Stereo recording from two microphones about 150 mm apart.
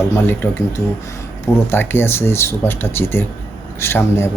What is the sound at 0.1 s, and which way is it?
Speech, 15° left (ahead or behind).